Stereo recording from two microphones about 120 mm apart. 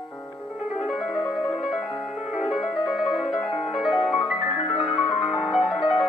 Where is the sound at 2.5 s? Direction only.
5° left (ahead or behind).